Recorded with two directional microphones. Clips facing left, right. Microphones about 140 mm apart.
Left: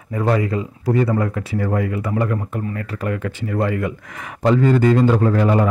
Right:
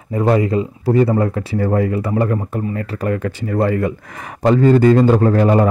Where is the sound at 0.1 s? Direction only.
25° right (ahead or behind).